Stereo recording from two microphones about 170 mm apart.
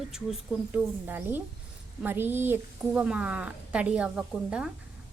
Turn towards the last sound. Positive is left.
turn(degrees=-5)  # may be behind; listen again after turning